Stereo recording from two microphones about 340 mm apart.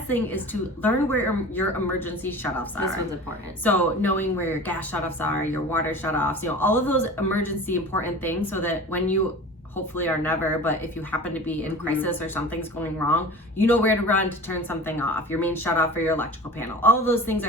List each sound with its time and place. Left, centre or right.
0.8 s speech: centre
3.6 s speech: centre